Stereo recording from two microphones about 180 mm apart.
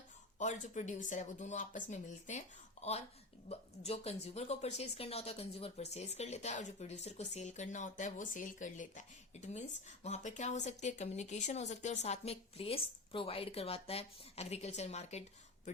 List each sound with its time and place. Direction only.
0.3 s speech: 40° left (ahead or behind)
2.8 s a sound: 40° left (ahead or behind)
3.5 s speech: 35° left (ahead or behind)